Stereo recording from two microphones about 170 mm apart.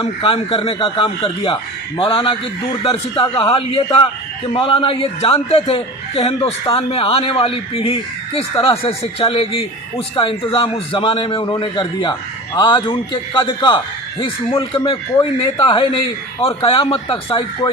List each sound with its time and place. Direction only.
0.0 s a man's voice: 30° left (ahead or behind)